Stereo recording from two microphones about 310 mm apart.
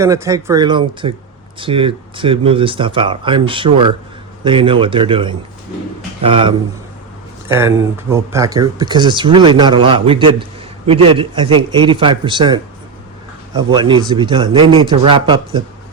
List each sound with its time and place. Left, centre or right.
0.0 s speech: centre
13.6 s speech: centre